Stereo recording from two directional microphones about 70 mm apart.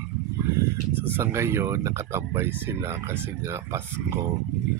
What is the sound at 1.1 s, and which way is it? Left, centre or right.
Speech, right.